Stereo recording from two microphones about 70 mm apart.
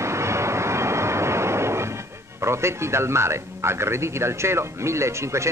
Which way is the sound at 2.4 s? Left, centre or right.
Right.